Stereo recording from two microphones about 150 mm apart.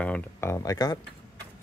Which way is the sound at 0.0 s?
15° left (ahead or behind).